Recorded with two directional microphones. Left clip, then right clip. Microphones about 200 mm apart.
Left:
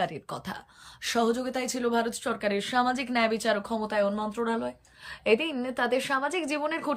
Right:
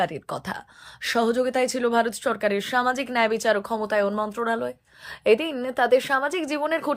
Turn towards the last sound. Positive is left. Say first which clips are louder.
# right 5 dB
turn(degrees=-20)  # may be behind; listen again after turning